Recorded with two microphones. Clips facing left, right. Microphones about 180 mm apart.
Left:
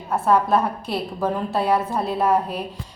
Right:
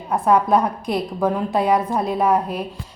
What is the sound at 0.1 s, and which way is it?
A woman's voice, 15° right (ahead or behind).